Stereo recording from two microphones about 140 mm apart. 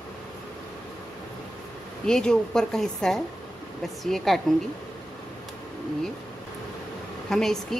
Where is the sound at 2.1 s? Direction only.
5° left (ahead or behind).